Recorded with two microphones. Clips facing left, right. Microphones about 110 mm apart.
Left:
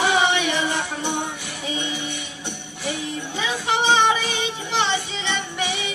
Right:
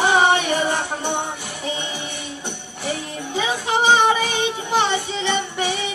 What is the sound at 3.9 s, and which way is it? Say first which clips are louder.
Music: right 2 dB; 45° right (ahead or behind).